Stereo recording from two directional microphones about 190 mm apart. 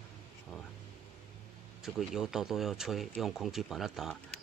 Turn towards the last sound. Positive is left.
turn(degrees=0)  # may be behind; listen again after turning